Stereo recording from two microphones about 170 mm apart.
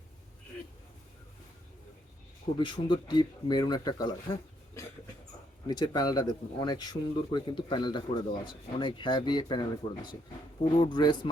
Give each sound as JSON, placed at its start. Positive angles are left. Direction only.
{"t": 2.6, "sound": "speech", "side_deg": 25}